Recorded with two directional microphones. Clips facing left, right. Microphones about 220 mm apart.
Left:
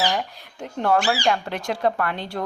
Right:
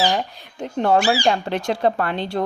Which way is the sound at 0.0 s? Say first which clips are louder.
Right 3 dB; 25° right (ahead or behind).